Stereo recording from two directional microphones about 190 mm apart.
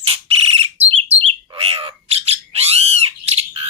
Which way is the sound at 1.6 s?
30° right (ahead or behind).